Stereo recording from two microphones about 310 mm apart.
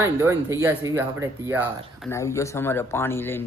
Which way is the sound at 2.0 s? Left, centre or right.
Centre.